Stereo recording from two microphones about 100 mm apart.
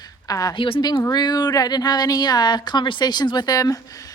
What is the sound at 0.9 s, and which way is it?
Speech, 40° left (ahead or behind).